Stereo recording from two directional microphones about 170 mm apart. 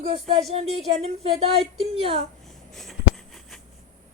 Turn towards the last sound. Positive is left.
turn(degrees=0)  # may be behind; listen again after turning